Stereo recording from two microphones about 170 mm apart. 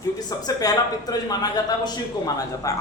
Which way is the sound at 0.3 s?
20° left (ahead or behind).